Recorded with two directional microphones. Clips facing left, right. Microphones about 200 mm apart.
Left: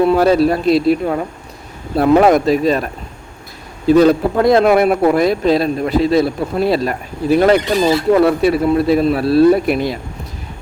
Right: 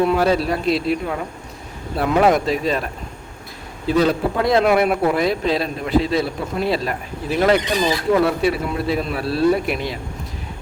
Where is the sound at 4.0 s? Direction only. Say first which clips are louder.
Left 5 dB; 45° left (ahead or behind).